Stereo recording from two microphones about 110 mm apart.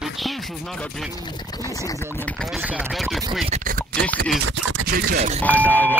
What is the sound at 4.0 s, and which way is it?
Music, 10° left (ahead or behind).